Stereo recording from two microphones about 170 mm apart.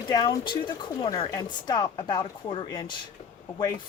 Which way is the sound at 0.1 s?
25° left (ahead or behind).